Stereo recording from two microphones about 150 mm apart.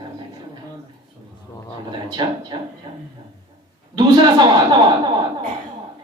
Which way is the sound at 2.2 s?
30° right (ahead or behind).